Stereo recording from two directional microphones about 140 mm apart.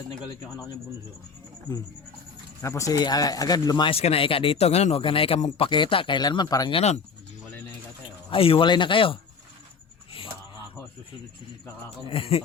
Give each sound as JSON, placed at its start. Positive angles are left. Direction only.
{"t": 0.1, "sound": "speech", "side_deg": 25}
{"t": 2.6, "sound": "speech", "side_deg": 20}
{"t": 3.9, "sound": "speech", "side_deg": 45}
{"t": 6.7, "sound": "speech", "side_deg": 50}
{"t": 8.3, "sound": "speech", "side_deg": 40}
{"t": 12.0, "sound": "speech", "side_deg": 40}